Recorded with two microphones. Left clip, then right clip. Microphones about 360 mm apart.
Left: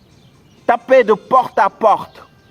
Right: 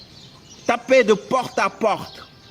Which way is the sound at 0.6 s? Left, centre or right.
Left.